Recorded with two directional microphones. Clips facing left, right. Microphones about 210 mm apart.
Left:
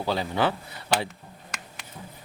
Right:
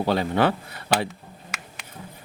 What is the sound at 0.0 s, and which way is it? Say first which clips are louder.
Speech: right 4 dB; 60° right (ahead or behind).